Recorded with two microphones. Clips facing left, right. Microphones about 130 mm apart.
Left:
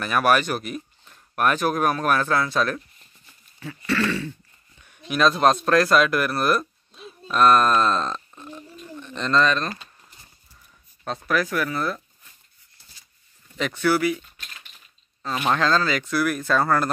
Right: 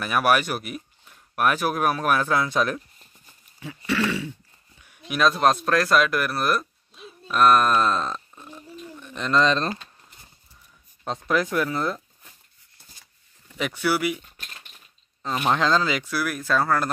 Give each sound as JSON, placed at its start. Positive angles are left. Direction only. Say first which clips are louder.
{"t": 0.0, "sound": "speech", "louder": "left 1 dB", "side_deg": -10}
{"t": 9.4, "sound": "speech", "louder": "right 1 dB", "side_deg": -25}
{"t": 9.8, "sound": "a sound", "louder": "even", "side_deg": 0}
{"t": 11.1, "sound": "speech", "louder": "even", "side_deg": -20}
{"t": 13.6, "sound": "speech", "louder": "left 3 dB", "side_deg": -10}
{"t": 15.2, "sound": "speech", "louder": "even", "side_deg": -15}